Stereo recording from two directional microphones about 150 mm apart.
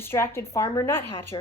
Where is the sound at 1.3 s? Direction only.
30° left (ahead or behind).